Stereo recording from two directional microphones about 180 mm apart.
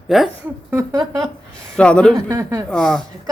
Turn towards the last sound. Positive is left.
turn(degrees=5)  # may be behind; listen again after turning